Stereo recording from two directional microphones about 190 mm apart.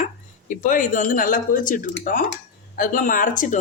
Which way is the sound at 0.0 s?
45° left (ahead or behind).